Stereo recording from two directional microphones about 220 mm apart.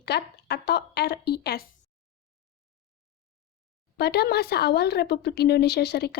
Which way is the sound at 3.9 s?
45° left (ahead or behind).